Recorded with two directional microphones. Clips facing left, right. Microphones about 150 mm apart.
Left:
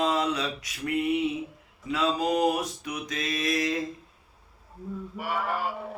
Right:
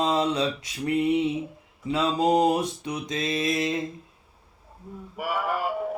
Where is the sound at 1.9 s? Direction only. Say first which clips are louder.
Right 4 dB; 25° right (ahead or behind).